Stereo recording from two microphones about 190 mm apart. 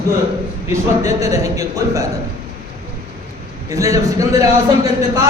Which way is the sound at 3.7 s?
15° right (ahead or behind).